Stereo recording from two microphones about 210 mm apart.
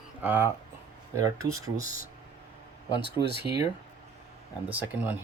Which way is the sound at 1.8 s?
40° left (ahead or behind).